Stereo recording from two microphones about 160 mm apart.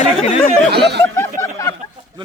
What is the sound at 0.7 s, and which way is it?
Speech, 90° right.